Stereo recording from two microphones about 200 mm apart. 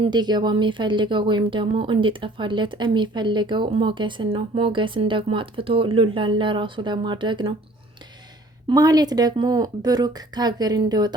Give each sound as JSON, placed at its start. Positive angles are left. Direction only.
{"t": 0.0, "sound": "speech", "side_deg": -20}
{"t": 8.7, "sound": "speech", "side_deg": -20}